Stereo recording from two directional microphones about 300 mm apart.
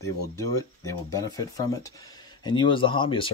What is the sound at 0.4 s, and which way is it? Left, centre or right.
Speech, centre.